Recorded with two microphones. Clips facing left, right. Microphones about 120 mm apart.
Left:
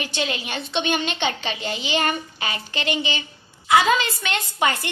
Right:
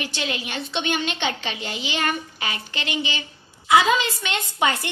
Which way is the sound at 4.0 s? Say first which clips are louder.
Left 1 dB; 15° right (ahead or behind).